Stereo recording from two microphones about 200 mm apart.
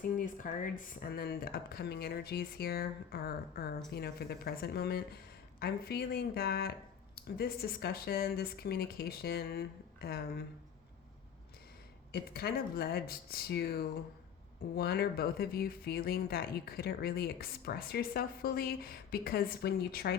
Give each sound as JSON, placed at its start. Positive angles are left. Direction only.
{"t": 0.0, "sound": "speech", "side_deg": 40}
{"t": 12.1, "sound": "speech", "side_deg": 50}